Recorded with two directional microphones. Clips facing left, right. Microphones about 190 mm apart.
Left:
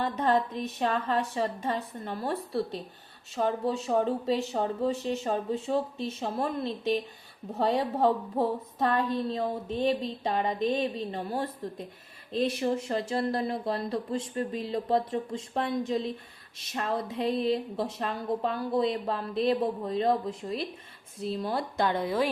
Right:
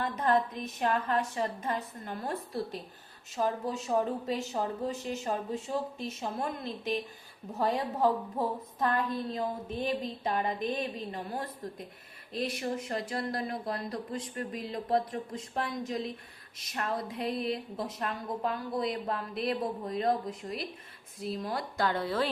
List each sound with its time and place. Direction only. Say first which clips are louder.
0.0 s a woman's voice: left 2 dB; 30° left (ahead or behind)